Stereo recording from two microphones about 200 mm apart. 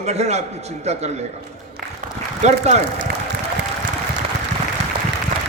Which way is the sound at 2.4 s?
35° right (ahead or behind).